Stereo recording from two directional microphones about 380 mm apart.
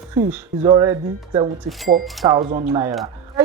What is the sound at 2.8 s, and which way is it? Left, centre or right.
Speech, centre.